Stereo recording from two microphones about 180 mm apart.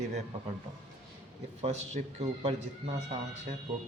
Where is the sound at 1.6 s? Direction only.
35° right (ahead or behind).